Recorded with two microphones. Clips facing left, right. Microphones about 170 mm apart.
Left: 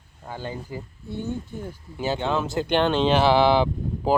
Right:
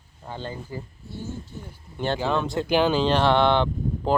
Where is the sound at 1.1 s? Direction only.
60° left (ahead or behind).